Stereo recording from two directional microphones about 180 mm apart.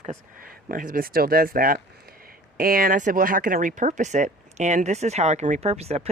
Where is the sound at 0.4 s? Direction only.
50° right (ahead or behind).